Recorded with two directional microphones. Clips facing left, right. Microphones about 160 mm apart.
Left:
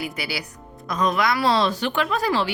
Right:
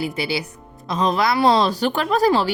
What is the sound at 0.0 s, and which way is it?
Speech, 25° right (ahead or behind).